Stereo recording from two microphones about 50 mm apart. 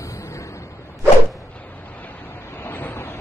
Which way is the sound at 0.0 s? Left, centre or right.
Left.